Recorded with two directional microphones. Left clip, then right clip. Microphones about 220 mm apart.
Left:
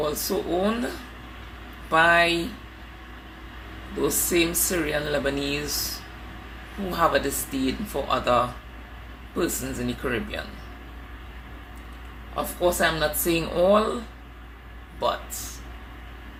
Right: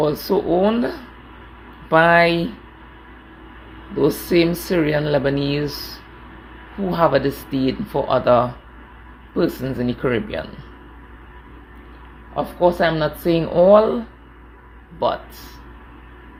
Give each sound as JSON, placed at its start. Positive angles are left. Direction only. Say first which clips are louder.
{"t": 0.0, "sound": "speech", "louder": "right 7 dB", "side_deg": -35}
{"t": 1.9, "sound": "speech", "louder": "right 5 dB", "side_deg": -40}
{"t": 4.0, "sound": "speech", "louder": "right 6 dB", "side_deg": -35}
{"t": 6.9, "sound": "speech", "louder": "right 5 dB", "side_deg": -35}
{"t": 12.4, "sound": "speech", "louder": "right 6 dB", "side_deg": -30}